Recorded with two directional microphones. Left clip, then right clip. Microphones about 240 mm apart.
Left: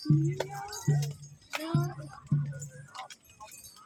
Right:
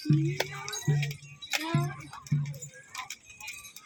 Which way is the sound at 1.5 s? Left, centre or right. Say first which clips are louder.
Right 3 dB; right.